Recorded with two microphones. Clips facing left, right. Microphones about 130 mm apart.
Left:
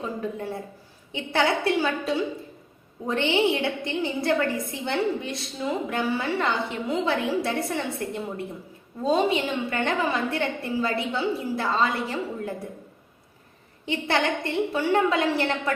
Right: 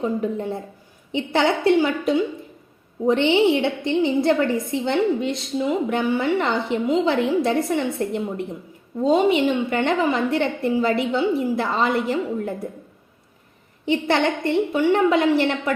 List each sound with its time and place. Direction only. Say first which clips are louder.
0.0 s a woman's voice: right 7 dB; 20° right (ahead or behind)
13.8 s a woman's voice: right 5 dB; 20° right (ahead or behind)